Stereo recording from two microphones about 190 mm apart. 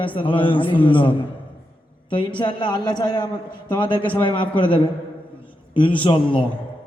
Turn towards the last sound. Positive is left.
turn(degrees=25)  # may be behind; listen again after turning